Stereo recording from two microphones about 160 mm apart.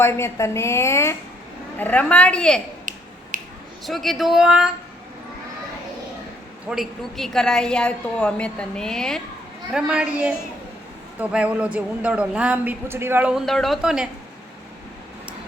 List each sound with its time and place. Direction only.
0.0 s a woman's voice: 15° left (ahead or behind)
3.3 s a sound: 60° right (ahead or behind)
3.8 s a woman's voice: centre (ahead or behind)
6.7 s a woman's voice: centre (ahead or behind)